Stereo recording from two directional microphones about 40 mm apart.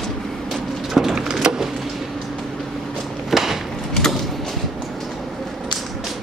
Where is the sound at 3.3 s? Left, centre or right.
Centre.